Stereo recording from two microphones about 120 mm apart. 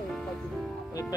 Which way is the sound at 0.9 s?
30° left (ahead or behind).